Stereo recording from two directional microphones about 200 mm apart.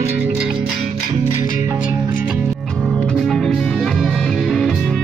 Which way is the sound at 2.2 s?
Centre (ahead or behind).